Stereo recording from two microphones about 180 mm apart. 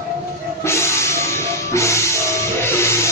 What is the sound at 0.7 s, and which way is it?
Music, 15° left (ahead or behind).